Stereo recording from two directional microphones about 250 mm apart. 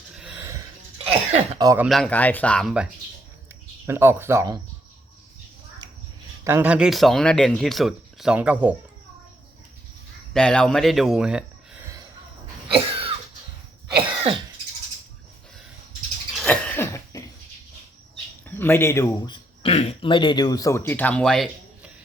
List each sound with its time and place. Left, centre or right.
0.2 s gasp: centre
0.9 s cough: right
1.9 s speech: centre
3.8 s speech: centre
6.4 s speech: centre
10.3 s speech: centre
12.7 s a sound: right
16.3 s cough: centre
18.4 s speech: centre